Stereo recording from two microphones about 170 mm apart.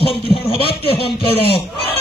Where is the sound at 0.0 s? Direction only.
30° left (ahead or behind).